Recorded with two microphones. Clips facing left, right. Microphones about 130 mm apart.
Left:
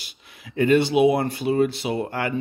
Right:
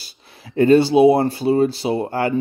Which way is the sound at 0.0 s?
35° right (ahead or behind).